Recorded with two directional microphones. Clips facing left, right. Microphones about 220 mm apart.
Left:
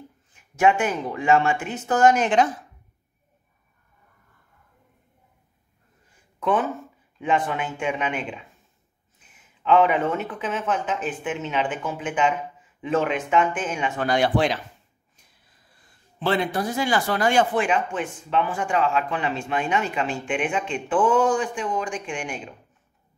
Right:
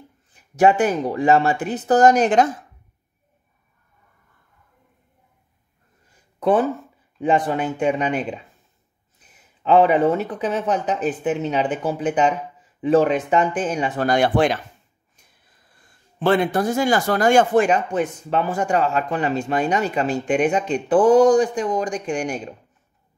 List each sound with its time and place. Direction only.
0.3 s speech: 35° right (ahead or behind)
6.4 s speech: 35° right (ahead or behind)
15.7 s speech: 50° right (ahead or behind)